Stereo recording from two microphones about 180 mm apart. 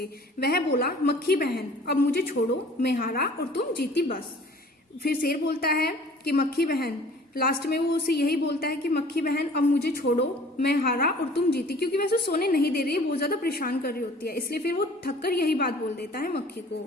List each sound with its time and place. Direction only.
0.0 s a woman's voice: 60° left (ahead or behind)